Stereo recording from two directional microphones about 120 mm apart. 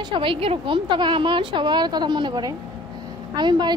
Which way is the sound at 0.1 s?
45° right (ahead or behind).